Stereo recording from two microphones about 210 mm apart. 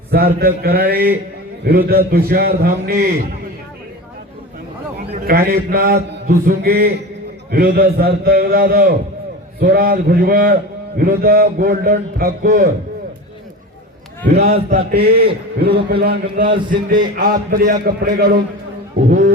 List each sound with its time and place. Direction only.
0.1 s a man's voice: 45° right (ahead or behind)
5.1 s a man's voice: 45° right (ahead or behind)
14.5 s a man's voice: 45° right (ahead or behind)